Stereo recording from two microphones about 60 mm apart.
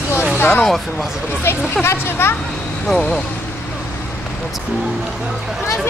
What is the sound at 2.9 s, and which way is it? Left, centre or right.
Speech, centre.